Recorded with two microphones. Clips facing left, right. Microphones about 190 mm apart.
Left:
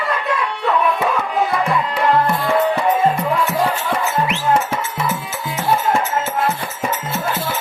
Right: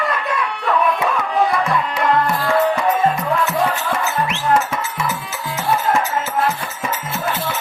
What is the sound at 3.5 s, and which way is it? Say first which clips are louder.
Music: even; 30° left (ahead or behind).